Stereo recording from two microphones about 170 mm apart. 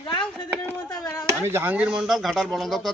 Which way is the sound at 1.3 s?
15° right (ahead or behind).